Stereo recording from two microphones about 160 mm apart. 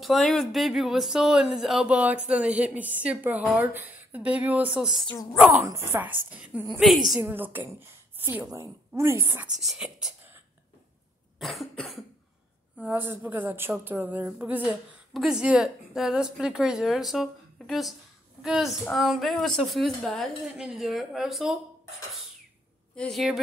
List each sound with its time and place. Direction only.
0.0 s a woman's voice: centre (ahead or behind)
9.6 s a woman's voice: 5° right (ahead or behind)
11.3 s a woman's voice: centre (ahead or behind)
12.8 s a woman's voice: 15° right (ahead or behind)
22.9 s a woman's voice: centre (ahead or behind)